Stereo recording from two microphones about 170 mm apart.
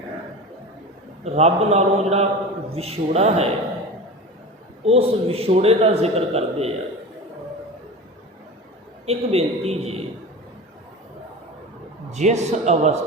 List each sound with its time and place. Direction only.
1.2 s a man's voice: 40° right (ahead or behind)
4.9 s a man's voice: 35° right (ahead or behind)
9.0 s a man's voice: 35° right (ahead or behind)
12.1 s a man's voice: 40° right (ahead or behind)